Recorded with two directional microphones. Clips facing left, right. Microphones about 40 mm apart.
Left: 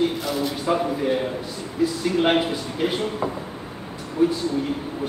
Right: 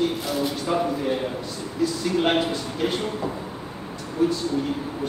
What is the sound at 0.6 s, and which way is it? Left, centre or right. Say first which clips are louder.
A man's voice: left 3 dB; centre.